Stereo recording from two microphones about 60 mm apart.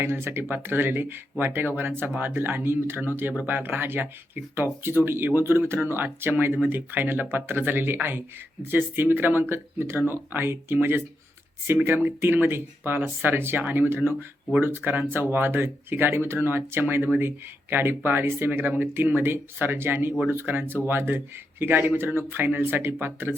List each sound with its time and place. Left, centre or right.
0.0 s speech: right
12.0 s speech: right